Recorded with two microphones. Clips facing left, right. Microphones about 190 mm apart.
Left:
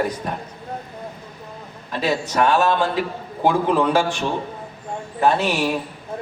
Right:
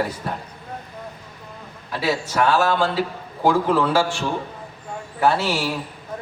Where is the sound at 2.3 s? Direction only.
15° left (ahead or behind).